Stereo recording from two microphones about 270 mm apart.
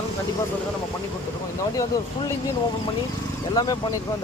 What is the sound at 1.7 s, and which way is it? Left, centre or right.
Speech, centre.